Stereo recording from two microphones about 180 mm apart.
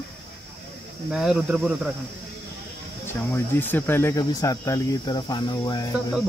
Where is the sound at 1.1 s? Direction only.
Centre (ahead or behind).